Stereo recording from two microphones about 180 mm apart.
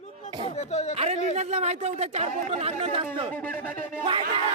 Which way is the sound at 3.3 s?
10° left (ahead or behind).